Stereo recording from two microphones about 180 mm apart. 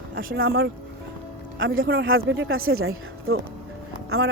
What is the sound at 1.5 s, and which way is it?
Speech, 90° right.